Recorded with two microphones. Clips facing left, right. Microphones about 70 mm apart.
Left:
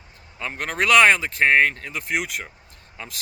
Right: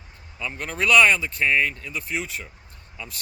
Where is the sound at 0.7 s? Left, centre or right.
Left.